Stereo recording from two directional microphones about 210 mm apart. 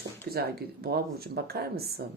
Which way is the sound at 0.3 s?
45° right (ahead or behind).